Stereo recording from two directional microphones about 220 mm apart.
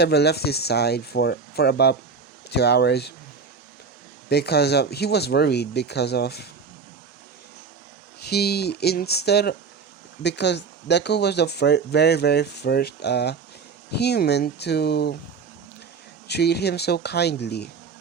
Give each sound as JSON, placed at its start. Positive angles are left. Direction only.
{"t": 0.0, "sound": "speech", "side_deg": 50}
{"t": 4.3, "sound": "speech", "side_deg": 45}
{"t": 8.3, "sound": "speech", "side_deg": 45}
{"t": 16.3, "sound": "speech", "side_deg": 50}